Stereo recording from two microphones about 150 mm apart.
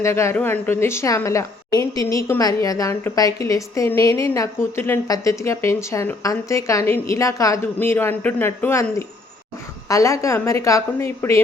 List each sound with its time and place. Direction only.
0.0 s a woman's voice: 20° left (ahead or behind)